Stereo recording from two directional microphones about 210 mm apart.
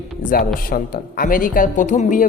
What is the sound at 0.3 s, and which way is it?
Speech, 45° left (ahead or behind).